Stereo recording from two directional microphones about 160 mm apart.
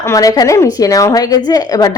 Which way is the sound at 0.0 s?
20° left (ahead or behind).